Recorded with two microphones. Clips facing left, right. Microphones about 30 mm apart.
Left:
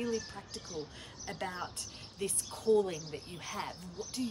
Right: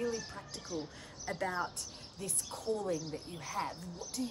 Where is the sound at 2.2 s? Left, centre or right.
Left.